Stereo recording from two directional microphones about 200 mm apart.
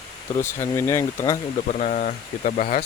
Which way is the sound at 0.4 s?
10° left (ahead or behind).